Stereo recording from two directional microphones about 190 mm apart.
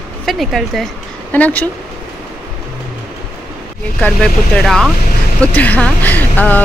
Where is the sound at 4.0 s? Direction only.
5° left (ahead or behind).